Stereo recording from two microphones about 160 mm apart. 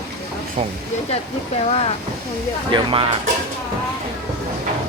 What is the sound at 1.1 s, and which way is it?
Speech, 40° left (ahead or behind).